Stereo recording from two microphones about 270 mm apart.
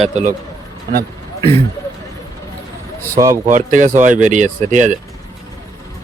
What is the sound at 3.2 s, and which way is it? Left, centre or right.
Speech, centre.